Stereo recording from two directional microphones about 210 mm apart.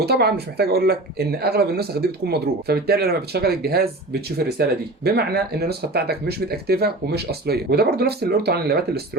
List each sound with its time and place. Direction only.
0.0 s speech: 50° right (ahead or behind)